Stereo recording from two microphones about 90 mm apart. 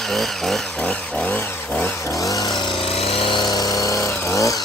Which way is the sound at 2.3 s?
45° left (ahead or behind).